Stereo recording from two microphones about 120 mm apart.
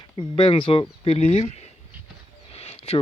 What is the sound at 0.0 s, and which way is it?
Speech, 40° left (ahead or behind).